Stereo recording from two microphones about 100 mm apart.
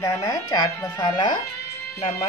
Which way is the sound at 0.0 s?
35° left (ahead or behind).